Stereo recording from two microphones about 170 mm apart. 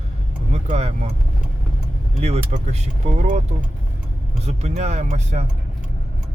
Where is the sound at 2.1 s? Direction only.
40° right (ahead or behind).